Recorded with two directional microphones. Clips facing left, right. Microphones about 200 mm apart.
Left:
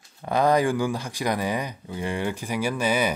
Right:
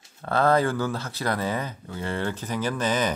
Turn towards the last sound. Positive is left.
turn(degrees=10)  # may be behind; listen again after turning